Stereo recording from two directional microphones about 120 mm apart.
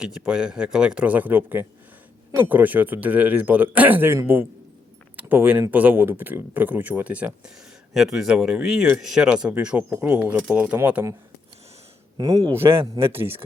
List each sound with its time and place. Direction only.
0.0 s a man's voice: 5° right (ahead or behind)
12.1 s speech: 35° right (ahead or behind)
12.5 s speech: 20° right (ahead or behind)